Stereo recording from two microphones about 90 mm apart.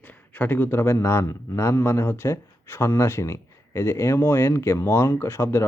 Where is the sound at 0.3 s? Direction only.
20° left (ahead or behind).